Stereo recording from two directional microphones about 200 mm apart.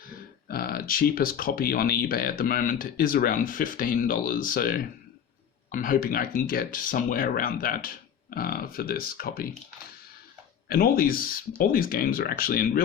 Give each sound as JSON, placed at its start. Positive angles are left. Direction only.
{"t": 0.4, "sound": "speech", "side_deg": 45}
{"t": 10.7, "sound": "speech", "side_deg": 45}